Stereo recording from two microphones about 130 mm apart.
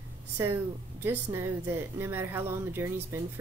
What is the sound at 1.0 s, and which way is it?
Speech, 15° right (ahead or behind).